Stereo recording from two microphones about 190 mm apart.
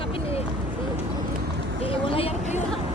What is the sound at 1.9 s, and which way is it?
Vehicle, 30° left (ahead or behind).